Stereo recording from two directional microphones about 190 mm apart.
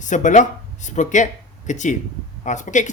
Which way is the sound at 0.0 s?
40° left (ahead or behind).